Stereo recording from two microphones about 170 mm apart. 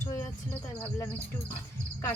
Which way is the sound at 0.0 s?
15° left (ahead or behind).